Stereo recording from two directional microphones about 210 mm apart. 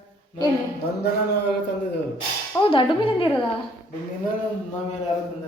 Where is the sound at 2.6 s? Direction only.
25° left (ahead or behind).